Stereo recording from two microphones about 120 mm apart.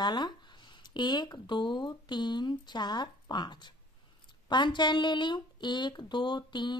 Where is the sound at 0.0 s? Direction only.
40° left (ahead or behind).